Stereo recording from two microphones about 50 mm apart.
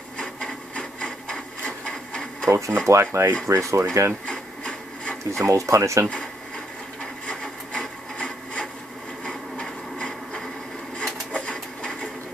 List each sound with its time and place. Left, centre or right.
0.7 s wood: centre
1.7 s printer: centre
2.4 s speech: right
2.9 s rub: right
3.4 s speech: right
4.3 s rub: centre
5.4 s speech: right
7.0 s wood: centre
9.2 s a sound: centre
11.3 s sewing machine: centre